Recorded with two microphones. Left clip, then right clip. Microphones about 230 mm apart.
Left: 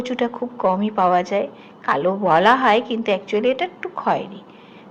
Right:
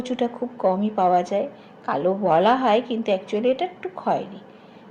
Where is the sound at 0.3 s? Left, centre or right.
Left.